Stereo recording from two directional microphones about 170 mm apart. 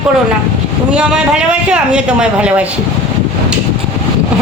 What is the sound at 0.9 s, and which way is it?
A man's voice, 5° right (ahead or behind).